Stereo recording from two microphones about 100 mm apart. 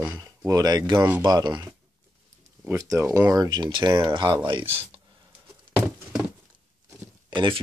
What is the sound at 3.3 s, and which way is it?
Speech, 40° right (ahead or behind).